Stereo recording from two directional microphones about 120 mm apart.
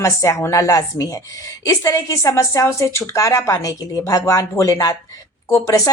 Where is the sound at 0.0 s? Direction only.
25° left (ahead or behind).